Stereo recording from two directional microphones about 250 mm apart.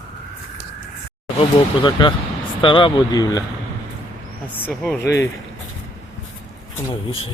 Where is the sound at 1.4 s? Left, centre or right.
Centre.